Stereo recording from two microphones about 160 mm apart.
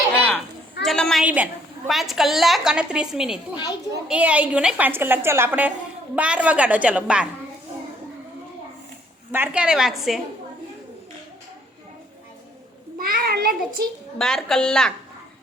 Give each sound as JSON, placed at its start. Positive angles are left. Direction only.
{"t": 0.3, "sound": "a sound", "side_deg": 0}
{"t": 1.2, "sound": "a woman's voice", "side_deg": -10}
{"t": 3.5, "sound": "speech", "side_deg": 25}
{"t": 4.1, "sound": "a woman's voice", "side_deg": -10}
{"t": 9.3, "sound": "a woman's voice", "side_deg": -10}
{"t": 13.0, "sound": "a child's voice", "side_deg": -65}
{"t": 14.2, "sound": "a woman's voice", "side_deg": 5}